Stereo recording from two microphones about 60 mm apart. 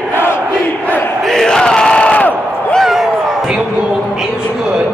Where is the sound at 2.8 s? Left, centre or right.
Centre.